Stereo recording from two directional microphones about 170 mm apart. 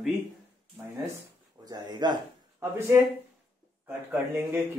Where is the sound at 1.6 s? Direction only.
25° right (ahead or behind).